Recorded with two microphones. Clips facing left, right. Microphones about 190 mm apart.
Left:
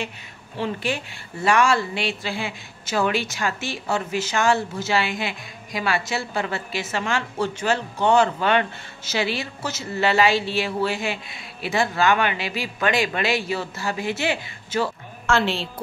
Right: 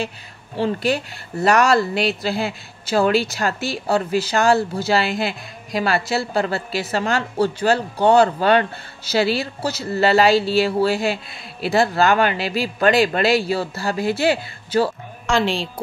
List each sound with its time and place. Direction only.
0.6 s a woman's voice: 40° right (ahead or behind)
15.2 s a woman's voice: 15° right (ahead or behind)